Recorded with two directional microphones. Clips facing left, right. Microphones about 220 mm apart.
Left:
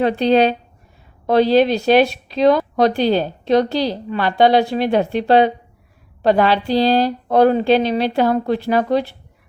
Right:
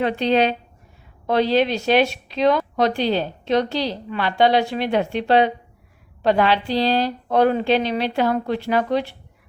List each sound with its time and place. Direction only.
0.0 s speech: 35° left (ahead or behind)